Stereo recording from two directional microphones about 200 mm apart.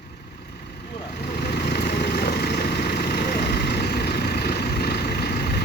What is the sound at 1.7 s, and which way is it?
Vehicle, 50° left (ahead or behind).